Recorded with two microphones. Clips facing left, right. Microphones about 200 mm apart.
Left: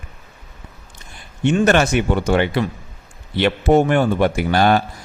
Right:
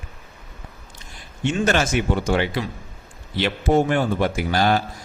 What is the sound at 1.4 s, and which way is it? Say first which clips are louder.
Speech: left 5 dB; 60° left (ahead or behind).